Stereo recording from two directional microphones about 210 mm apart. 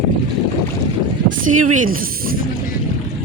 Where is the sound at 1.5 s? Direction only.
90° right.